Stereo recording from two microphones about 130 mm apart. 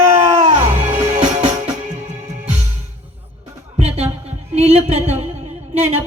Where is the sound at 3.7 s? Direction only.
55° right (ahead or behind).